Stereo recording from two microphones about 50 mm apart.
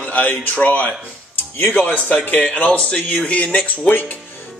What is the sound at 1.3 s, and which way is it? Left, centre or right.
Speech, left.